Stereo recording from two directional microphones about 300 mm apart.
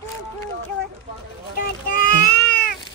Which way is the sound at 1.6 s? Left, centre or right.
Left.